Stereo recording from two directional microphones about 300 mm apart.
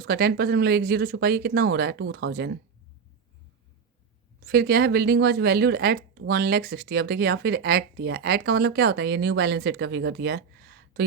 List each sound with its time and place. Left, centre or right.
0.0 s speech: right
4.4 s speech: right